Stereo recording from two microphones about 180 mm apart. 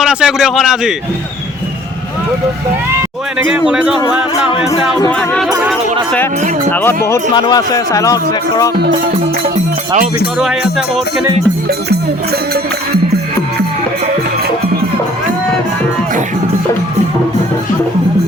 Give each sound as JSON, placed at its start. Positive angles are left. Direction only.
{"t": 0.0, "sound": "speech", "side_deg": -5}
{"t": 3.7, "sound": "speech", "side_deg": -5}
{"t": 4.9, "sound": "speech", "side_deg": 15}
{"t": 5.5, "sound": "speech", "side_deg": -5}
{"t": 6.7, "sound": "speech", "side_deg": 10}
{"t": 8.7, "sound": "music", "side_deg": -65}
{"t": 10.3, "sound": "speech", "side_deg": -5}